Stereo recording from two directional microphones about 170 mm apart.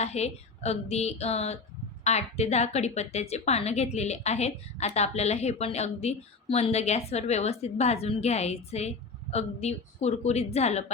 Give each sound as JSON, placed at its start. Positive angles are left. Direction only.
{"t": 0.0, "sound": "a woman's voice", "side_deg": 40}